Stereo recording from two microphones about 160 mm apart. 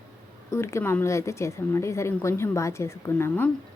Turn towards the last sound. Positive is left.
turn(degrees=15)  # may be behind; listen again after turning